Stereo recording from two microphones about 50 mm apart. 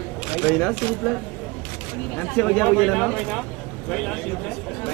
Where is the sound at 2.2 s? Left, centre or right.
Centre.